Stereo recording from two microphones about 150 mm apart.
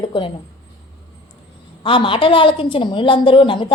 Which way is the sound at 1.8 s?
35° left (ahead or behind).